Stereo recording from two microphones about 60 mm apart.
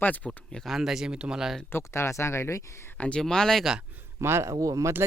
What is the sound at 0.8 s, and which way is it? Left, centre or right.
Speech, centre.